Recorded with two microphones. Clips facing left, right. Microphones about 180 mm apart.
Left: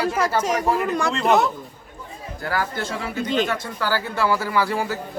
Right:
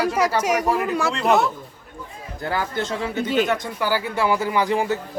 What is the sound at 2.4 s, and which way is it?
A man's voice, 20° right (ahead or behind).